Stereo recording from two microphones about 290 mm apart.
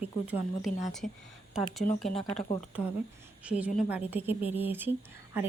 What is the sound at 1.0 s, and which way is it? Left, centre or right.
Speech, left.